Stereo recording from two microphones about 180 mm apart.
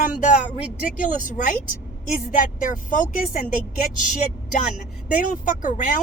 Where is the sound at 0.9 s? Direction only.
45° left (ahead or behind).